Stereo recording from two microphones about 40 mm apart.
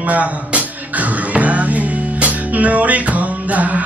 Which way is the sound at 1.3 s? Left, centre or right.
Right.